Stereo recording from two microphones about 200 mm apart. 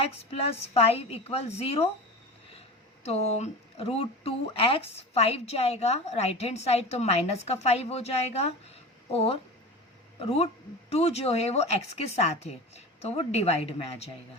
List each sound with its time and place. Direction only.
0.0 s speech: 30° left (ahead or behind)
3.0 s speech: 35° left (ahead or behind)